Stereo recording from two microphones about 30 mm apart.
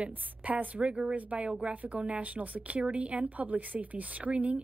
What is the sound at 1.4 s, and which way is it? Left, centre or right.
A woman's voice, right.